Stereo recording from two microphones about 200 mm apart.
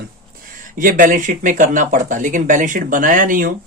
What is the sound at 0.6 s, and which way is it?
Speech, 40° right (ahead or behind).